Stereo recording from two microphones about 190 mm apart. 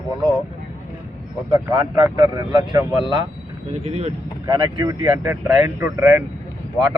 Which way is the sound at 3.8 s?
35° right (ahead or behind).